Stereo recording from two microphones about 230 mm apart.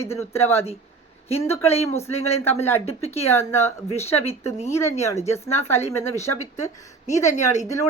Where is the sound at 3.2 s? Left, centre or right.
Centre.